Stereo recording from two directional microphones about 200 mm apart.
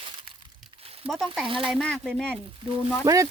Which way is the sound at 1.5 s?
25° right (ahead or behind).